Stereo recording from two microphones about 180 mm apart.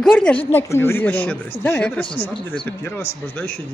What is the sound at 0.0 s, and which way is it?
Speech, 5° left (ahead or behind).